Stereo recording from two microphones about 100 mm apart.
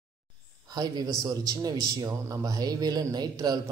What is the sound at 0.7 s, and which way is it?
Speech, 40° right (ahead or behind).